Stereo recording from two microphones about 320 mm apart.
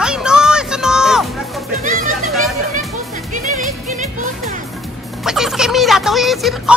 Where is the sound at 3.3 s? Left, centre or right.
Right.